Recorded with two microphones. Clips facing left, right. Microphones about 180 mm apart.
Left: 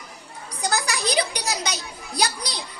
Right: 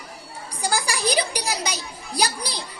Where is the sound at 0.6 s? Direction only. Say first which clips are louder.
Right 1 dB; 10° right (ahead or behind).